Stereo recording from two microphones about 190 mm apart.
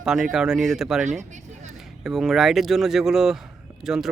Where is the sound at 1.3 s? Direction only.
40° right (ahead or behind).